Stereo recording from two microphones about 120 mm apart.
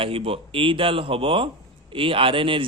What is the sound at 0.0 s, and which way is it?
Speech, 50° right (ahead or behind).